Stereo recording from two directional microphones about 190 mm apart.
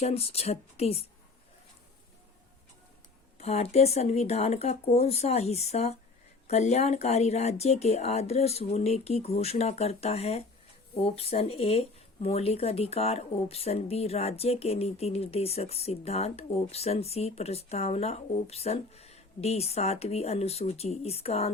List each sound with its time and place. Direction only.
0.0 s speech: 35° left (ahead or behind)
3.3 s speech: 35° left (ahead or behind)